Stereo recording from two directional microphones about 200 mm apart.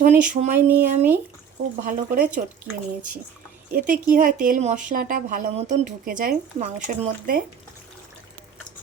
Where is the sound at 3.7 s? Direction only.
40° right (ahead or behind).